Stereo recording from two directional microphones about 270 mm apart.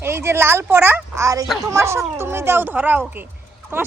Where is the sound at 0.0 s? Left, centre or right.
Centre.